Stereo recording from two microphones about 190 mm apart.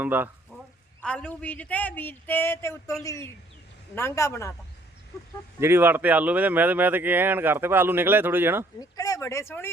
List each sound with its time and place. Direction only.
0.0 s speech: 10° right (ahead or behind)
1.0 s speech: 5° left (ahead or behind)
5.5 s speech: 10° right (ahead or behind)
8.8 s speech: 20° left (ahead or behind)